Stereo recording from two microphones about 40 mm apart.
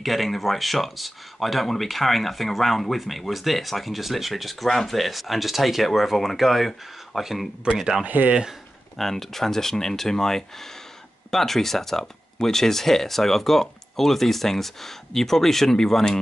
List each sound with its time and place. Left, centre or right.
0.0 s speech: centre
8.0 s speech: right
8.9 s speech: centre